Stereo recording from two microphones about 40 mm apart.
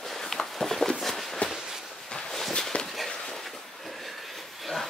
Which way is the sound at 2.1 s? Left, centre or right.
Centre.